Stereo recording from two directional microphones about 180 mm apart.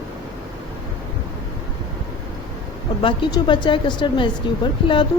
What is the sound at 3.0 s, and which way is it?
Speech, 25° left (ahead or behind).